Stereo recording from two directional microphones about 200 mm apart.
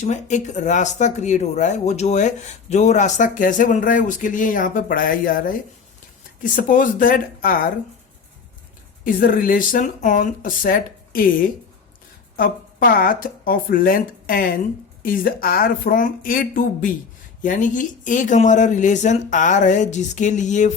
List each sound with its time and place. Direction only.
0.0 s speech: 35° left (ahead or behind)
9.0 s speech: 45° left (ahead or behind)